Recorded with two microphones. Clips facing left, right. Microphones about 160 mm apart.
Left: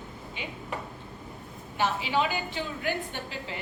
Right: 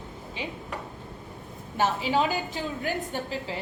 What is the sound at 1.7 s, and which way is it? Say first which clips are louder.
A woman's voice: right 2 dB; 40° right (ahead or behind).